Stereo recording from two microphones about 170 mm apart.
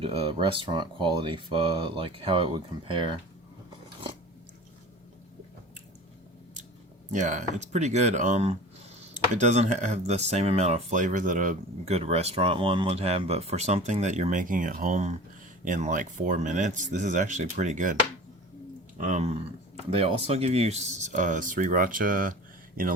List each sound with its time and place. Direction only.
0.0 s speech: 35° right (ahead or behind)
7.1 s speech: 45° right (ahead or behind)
18.9 s speech: 45° right (ahead or behind)